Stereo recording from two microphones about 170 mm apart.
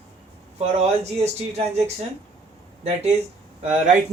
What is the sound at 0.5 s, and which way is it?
Speech, 35° right (ahead or behind).